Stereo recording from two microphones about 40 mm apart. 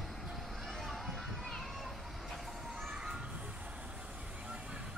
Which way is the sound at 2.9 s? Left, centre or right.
Right.